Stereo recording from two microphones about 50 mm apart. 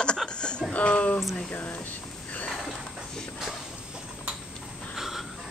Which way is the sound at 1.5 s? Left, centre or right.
Left.